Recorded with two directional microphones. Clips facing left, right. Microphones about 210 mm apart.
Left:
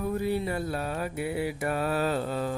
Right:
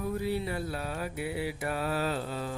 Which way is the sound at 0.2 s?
50° left (ahead or behind).